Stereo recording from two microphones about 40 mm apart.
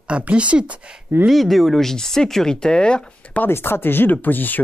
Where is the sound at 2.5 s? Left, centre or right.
Left.